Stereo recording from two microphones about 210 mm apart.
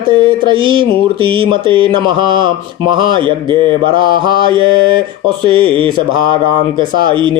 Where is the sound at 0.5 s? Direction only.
25° right (ahead or behind).